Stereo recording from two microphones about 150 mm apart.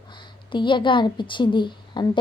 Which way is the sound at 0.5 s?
30° left (ahead or behind).